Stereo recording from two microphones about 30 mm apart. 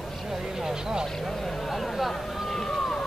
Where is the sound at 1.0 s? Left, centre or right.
Centre.